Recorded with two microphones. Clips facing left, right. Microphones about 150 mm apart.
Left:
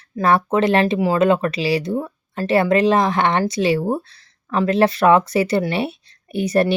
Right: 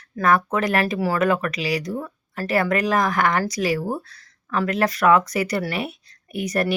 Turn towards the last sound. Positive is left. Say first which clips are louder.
# left 6 dB
turn(degrees=30)  # may be behind; listen again after turning